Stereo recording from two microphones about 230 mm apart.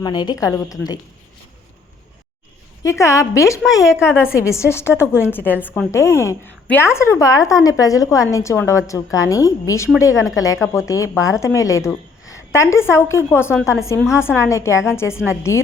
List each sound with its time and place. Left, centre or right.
0.0 s a woman's voice: centre
2.8 s a woman's voice: centre
3.9 s a woman's voice: centre
4.4 s a woman's voice: centre